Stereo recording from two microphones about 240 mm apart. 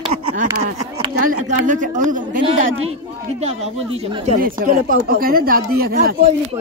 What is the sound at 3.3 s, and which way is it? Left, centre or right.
Speech, right.